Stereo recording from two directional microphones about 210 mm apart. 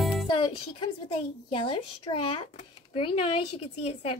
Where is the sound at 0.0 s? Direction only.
Centre (ahead or behind).